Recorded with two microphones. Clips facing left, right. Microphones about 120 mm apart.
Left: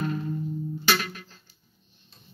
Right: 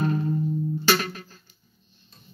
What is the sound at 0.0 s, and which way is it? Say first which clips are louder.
Music: right 5 dB; 40° right (ahead or behind).